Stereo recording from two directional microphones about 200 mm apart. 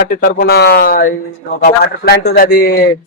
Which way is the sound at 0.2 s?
50° left (ahead or behind).